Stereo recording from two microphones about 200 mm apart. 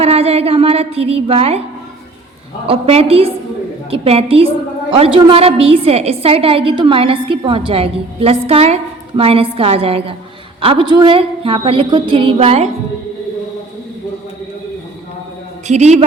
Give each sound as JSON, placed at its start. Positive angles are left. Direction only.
{"t": 0.0, "sound": "a woman's voice", "side_deg": -30}
{"t": 2.6, "sound": "a woman's voice", "side_deg": -30}
{"t": 15.6, "sound": "a woman's voice", "side_deg": -35}